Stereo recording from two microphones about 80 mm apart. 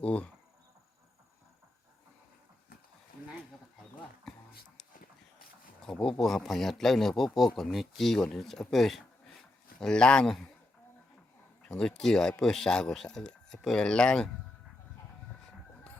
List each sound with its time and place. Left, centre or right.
0.0 s speech: centre
4.3 s a sound: centre
5.8 s speech: centre
11.7 s speech: centre